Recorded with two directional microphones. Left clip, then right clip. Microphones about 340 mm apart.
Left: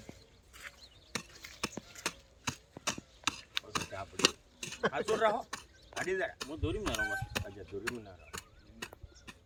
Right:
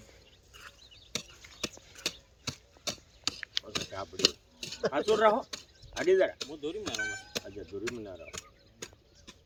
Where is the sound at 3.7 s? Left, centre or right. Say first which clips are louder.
Right 2 dB; centre.